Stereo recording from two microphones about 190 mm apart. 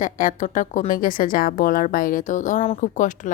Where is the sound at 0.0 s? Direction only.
45° left (ahead or behind).